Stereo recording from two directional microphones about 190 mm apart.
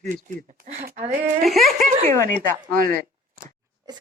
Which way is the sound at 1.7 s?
40° right (ahead or behind).